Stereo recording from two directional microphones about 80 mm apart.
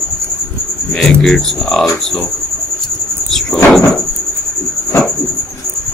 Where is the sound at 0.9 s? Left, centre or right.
Centre.